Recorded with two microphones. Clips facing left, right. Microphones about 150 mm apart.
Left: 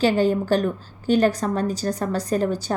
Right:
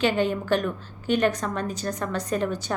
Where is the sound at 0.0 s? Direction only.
35° left (ahead or behind).